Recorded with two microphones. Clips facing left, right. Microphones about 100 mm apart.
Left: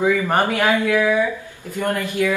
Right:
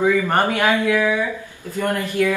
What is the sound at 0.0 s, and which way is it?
Speech, 15° left (ahead or behind).